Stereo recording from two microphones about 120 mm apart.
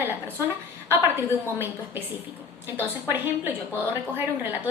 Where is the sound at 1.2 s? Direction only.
20° right (ahead or behind).